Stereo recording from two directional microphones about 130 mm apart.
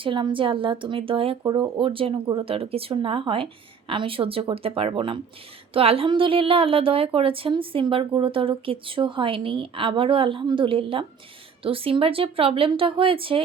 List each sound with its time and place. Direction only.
0.0 s a woman's voice: 40° right (ahead or behind)
1.5 s a woman's voice: 35° right (ahead or behind)